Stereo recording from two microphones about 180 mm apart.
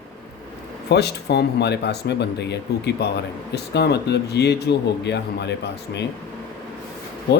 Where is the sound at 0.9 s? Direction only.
65° left (ahead or behind).